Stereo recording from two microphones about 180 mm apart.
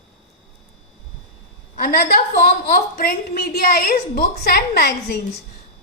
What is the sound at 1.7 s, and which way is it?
A woman's voice, 55° left (ahead or behind).